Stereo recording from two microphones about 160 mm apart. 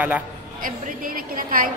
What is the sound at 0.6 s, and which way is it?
A woman's voice, 60° right (ahead or behind).